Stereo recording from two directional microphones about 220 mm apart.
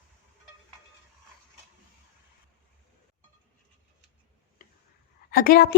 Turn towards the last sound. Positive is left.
turn(degrees=40)  # may be behind; listen again after turning